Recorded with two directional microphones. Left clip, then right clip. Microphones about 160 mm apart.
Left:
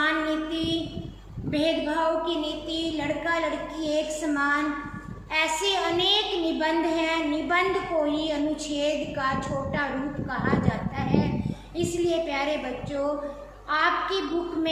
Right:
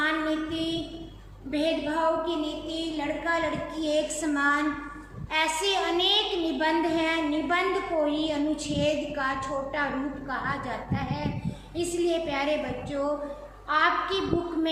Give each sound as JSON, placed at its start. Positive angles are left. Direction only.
{"t": 0.0, "sound": "child singing", "side_deg": 10}
{"t": 1.5, "sound": "a woman's voice", "side_deg": 10}
{"t": 3.8, "sound": "a woman's voice", "side_deg": -15}
{"t": 10.3, "sound": "a woman's voice", "side_deg": -10}